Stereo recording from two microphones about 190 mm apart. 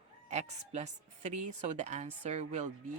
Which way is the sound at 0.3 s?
35° right (ahead or behind).